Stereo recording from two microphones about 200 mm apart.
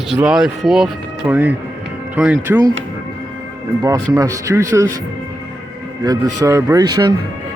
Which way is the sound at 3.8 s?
20° right (ahead or behind).